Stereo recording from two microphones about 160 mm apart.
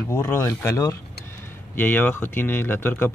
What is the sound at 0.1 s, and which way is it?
Speech, 15° left (ahead or behind).